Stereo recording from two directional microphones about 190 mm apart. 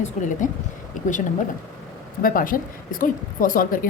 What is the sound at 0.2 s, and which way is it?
A woman's voice, 40° left (ahead or behind).